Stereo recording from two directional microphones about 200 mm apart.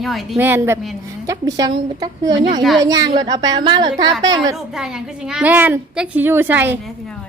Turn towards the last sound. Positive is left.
turn(degrees=-10)  # may be behind; listen again after turning